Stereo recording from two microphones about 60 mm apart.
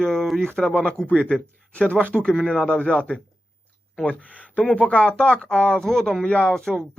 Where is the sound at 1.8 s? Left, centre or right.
Centre.